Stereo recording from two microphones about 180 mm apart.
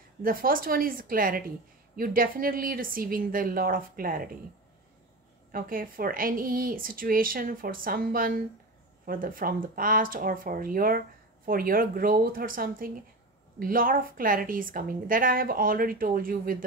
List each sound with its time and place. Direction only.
0.2 s a woman's voice: 50° right (ahead or behind)
5.5 s a woman's voice: 50° right (ahead or behind)